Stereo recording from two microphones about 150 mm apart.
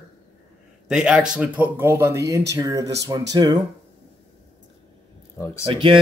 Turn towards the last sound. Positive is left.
turn(degrees=-35)  # may be behind; listen again after turning